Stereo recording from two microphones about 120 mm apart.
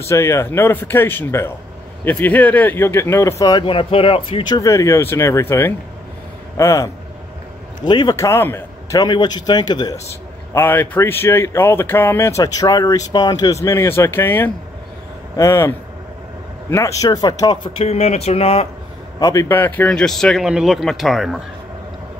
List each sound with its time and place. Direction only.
0.0 s speech: 20° left (ahead or behind)
3.6 s speech: 45° left (ahead or behind)
4.6 s speech: 25° left (ahead or behind)
7.8 s speech: 40° left (ahead or behind)
8.2 s a man's voice: 20° left (ahead or behind)
9.0 s speech: 35° left (ahead or behind)
10.5 s speech: 20° left (ahead or behind)
16.7 s speech: 30° left (ahead or behind)
17.7 s speech: 60° left (ahead or behind)
19.1 s a man's voice: 30° left (ahead or behind); by 21.4 s centre (ahead or behind)